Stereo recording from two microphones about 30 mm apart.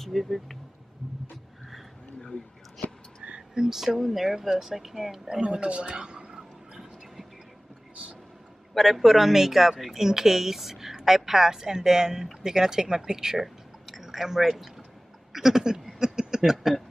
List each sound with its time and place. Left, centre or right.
0.0 s speech: centre
3.5 s speech: centre
5.4 s a man's voice: right
6.3 s a sound: right
8.7 s speech: centre
13.4 s a sound: centre